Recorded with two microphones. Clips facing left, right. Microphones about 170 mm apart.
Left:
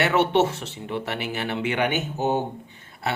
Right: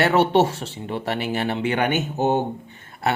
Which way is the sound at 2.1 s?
50° right (ahead or behind).